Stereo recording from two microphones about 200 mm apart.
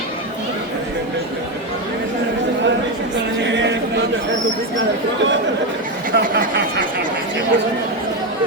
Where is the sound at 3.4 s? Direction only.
65° right (ahead or behind).